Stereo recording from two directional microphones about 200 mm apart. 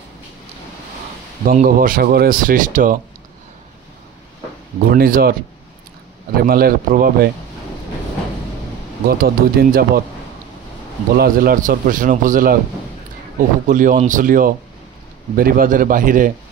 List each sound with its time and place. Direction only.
1.4 s speech: 45° right (ahead or behind)
4.8 s speech: 45° right (ahead or behind)
6.4 s speech: 45° right (ahead or behind)
9.2 s speech: 50° right (ahead or behind)
11.1 s speech: 50° right (ahead or behind)